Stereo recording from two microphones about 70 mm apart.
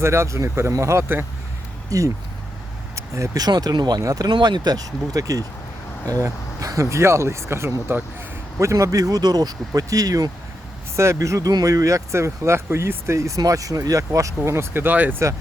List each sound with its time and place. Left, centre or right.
0.0 s speech: right
3.3 s speech: right
4.0 s speech: right
10.9 s speech: right
15.2 s speech: right